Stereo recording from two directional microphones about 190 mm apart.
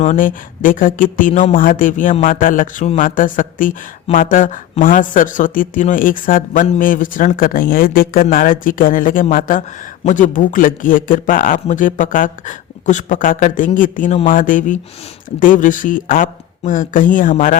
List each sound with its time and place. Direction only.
0.0 s speech: 40° left (ahead or behind)